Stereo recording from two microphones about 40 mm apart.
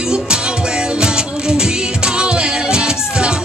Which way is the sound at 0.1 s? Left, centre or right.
Right.